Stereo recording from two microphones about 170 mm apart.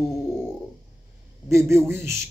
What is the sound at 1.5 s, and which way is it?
Speech, 15° right (ahead or behind).